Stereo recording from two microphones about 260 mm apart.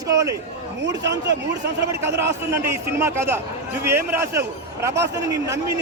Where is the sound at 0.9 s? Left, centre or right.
Right.